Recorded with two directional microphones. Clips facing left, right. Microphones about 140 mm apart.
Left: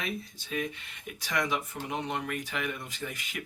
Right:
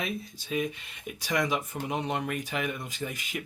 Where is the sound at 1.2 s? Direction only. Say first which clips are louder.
Right 2 dB; 20° right (ahead or behind).